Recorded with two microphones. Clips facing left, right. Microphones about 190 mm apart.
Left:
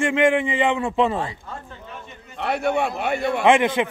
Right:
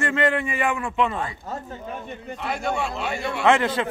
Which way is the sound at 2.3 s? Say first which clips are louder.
Left 5 dB; 65° left (ahead or behind).